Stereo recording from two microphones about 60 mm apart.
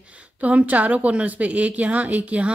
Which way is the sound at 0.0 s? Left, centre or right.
Right.